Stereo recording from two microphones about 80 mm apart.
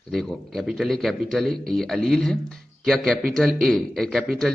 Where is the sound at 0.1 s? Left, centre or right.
Centre.